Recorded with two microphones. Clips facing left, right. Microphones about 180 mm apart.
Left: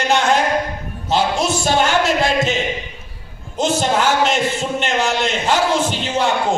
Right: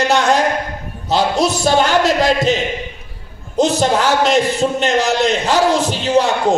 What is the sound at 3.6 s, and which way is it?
A man's voice, 40° right (ahead or behind).